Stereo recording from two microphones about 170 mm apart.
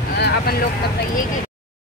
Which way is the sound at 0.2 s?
65° left (ahead or behind).